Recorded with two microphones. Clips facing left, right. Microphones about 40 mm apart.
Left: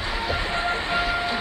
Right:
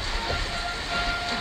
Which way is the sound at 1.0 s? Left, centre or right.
Centre.